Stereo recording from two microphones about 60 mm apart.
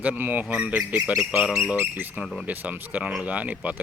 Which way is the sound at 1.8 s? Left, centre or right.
Right.